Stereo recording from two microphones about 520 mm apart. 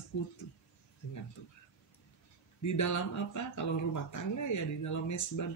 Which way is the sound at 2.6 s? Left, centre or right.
Left.